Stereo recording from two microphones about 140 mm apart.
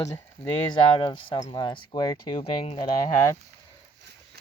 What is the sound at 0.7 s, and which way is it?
Speech, 35° left (ahead or behind).